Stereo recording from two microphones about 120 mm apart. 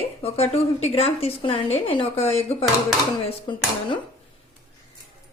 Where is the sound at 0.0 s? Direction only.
55° left (ahead or behind).